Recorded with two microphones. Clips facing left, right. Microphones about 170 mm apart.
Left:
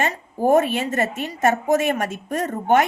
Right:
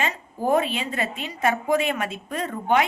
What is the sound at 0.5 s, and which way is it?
A woman's voice, 45° left (ahead or behind).